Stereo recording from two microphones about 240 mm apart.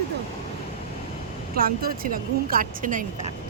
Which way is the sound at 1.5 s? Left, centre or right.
Right.